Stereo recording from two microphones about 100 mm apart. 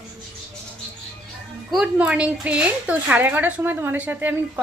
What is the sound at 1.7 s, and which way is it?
A woman's voice, 5° right (ahead or behind).